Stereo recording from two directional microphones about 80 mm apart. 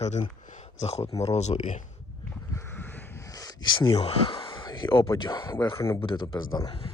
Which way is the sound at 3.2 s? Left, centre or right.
Left.